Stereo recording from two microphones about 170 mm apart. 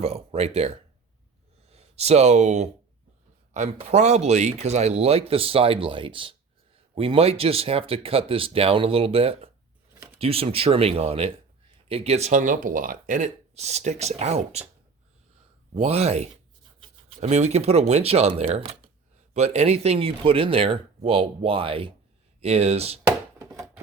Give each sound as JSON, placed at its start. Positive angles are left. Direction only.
{"t": 0.0, "sound": "speech", "side_deg": -35}
{"t": 15.7, "sound": "speech", "side_deg": -40}
{"t": 23.0, "sound": "a sound", "side_deg": -20}